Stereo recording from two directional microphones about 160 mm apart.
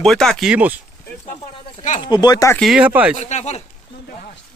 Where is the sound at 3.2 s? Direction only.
45° left (ahead or behind).